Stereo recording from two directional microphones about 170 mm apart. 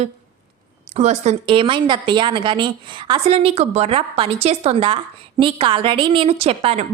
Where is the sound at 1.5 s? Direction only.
30° right (ahead or behind).